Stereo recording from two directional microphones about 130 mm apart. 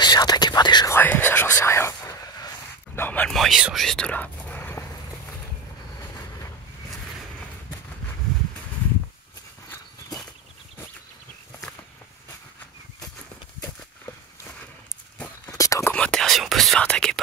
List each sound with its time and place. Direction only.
0.0 s whispering: 30° left (ahead or behind)
0.8 s whispering: 15° left (ahead or behind)
3.0 s a sound: 10° left (ahead or behind)
3.3 s whispering: centre (ahead or behind); by 4.8 s 15° left (ahead or behind)
15.5 s whispering: 25° left (ahead or behind)
15.9 s whispering: 5° left (ahead or behind)